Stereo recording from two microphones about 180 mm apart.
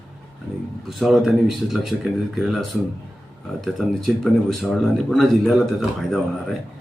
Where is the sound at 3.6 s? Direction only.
Centre (ahead or behind).